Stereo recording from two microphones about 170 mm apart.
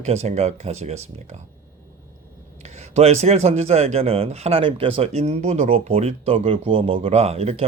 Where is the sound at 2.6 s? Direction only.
40° right (ahead or behind).